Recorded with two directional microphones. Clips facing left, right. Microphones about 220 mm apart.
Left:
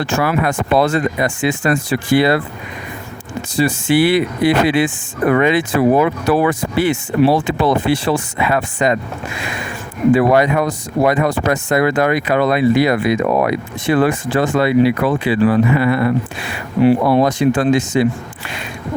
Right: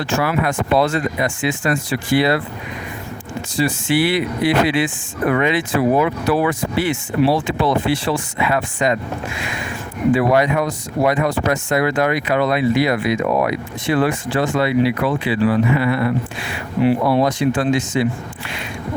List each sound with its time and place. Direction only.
0.0 s speech: 50° left (ahead or behind)
3.6 s speech: 45° left (ahead or behind)
10.2 s speech: 45° left (ahead or behind)